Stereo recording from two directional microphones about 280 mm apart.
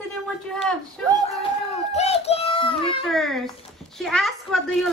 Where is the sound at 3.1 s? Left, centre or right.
Centre.